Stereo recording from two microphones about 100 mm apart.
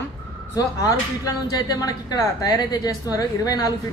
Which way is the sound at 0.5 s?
35° left (ahead or behind).